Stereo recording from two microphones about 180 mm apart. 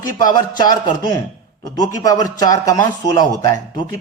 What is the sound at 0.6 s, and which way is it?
A man's voice, 25° left (ahead or behind).